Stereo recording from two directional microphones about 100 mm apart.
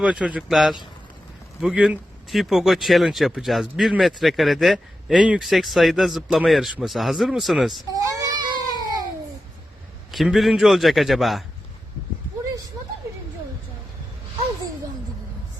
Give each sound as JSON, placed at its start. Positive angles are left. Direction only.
{"t": 0.0, "sound": "speech", "side_deg": -10}
{"t": 7.9, "sound": "baby cry", "side_deg": -35}
{"t": 10.1, "sound": "speech", "side_deg": 0}